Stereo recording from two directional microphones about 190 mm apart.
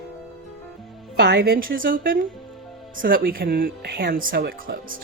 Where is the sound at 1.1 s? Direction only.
60° right (ahead or behind).